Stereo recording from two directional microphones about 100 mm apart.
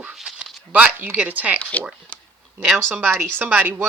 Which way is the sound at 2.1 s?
15° left (ahead or behind).